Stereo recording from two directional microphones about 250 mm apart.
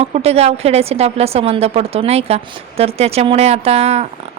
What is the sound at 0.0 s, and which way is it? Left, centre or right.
A woman's voice, right.